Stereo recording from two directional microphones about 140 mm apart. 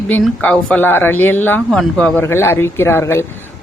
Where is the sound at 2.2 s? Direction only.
15° left (ahead or behind).